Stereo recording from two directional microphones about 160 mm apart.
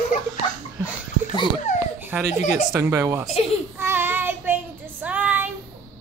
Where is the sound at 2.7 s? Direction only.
15° right (ahead or behind).